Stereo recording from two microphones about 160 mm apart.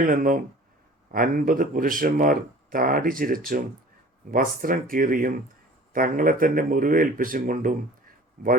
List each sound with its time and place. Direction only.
0.0 s speech: 60° right (ahead or behind)